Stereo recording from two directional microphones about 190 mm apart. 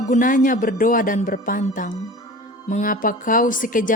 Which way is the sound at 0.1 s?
45° left (ahead or behind).